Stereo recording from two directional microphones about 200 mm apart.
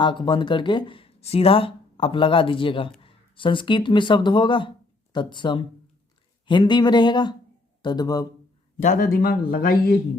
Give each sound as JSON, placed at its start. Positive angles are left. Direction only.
{"t": 0.0, "sound": "speech", "side_deg": 20}
{"t": 8.8, "sound": "speech", "side_deg": 40}